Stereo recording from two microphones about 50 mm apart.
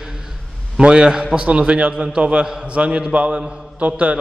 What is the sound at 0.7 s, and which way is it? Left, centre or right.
A man's voice, centre.